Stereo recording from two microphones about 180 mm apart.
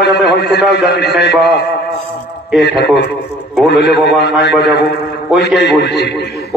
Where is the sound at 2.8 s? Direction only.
70° left (ahead or behind).